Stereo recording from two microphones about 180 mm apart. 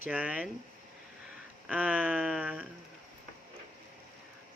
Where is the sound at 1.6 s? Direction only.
10° right (ahead or behind).